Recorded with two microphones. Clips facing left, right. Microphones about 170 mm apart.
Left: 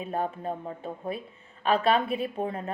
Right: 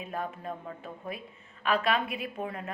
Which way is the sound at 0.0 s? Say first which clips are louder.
Left 5 dB; 30° left (ahead or behind).